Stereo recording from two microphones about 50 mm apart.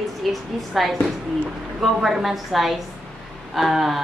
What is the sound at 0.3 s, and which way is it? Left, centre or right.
Speech, centre.